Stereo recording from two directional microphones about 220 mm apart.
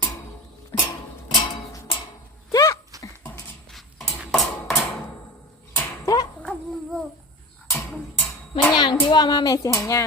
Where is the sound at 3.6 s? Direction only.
Centre (ahead or behind).